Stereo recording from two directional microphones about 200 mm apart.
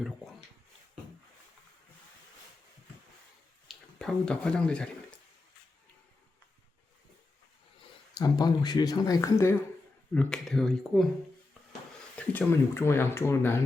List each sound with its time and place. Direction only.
3.7 s speech: 5° left (ahead or behind)
7.8 s speech: 20° left (ahead or behind)
10.2 s speech: 5° left (ahead or behind)
12.1 s speech: 10° left (ahead or behind)